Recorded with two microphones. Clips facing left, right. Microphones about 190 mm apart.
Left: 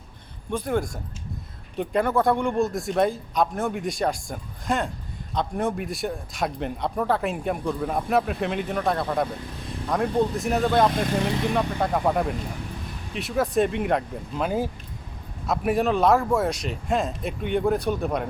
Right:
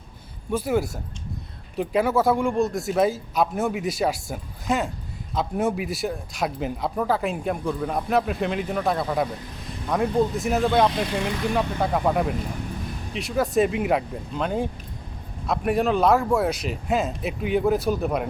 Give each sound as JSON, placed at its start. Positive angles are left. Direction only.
{"t": 0.5, "sound": "speech", "side_deg": -5}
{"t": 10.9, "sound": "speech", "side_deg": 50}
{"t": 11.2, "sound": "speech", "side_deg": 0}